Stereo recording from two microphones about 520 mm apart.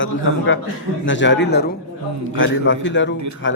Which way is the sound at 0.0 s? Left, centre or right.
Left.